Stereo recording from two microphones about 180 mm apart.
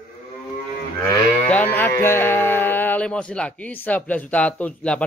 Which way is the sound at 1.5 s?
10° left (ahead or behind).